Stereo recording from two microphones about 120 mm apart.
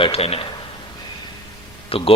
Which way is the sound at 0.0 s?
55° left (ahead or behind).